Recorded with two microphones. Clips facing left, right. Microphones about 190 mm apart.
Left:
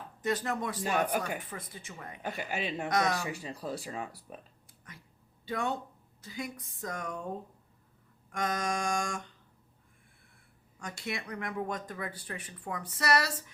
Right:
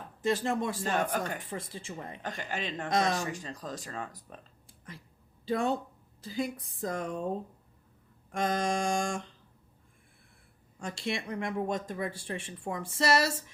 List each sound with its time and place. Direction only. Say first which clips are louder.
0.2 s speech: right 3 dB; 25° right (ahead or behind)
0.8 s speech: even; 10° left (ahead or behind)
1.5 s speech: right 5 dB; 30° right (ahead or behind)
2.2 s speech: left 2 dB; 10° left (ahead or behind)
2.9 s speech: right 2 dB; 25° right (ahead or behind)
3.2 s speech: left 1 dB; 10° left (ahead or behind)
5.5 s speech: right 4 dB; 30° right (ahead or behind)
8.3 s speech: right 3 dB; 30° right (ahead or behind)
10.8 s speech: right 4 dB; 30° right (ahead or behind)